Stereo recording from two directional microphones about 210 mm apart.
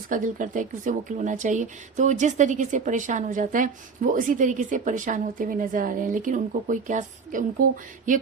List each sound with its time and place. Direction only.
0.1 s speech: 40° right (ahead or behind)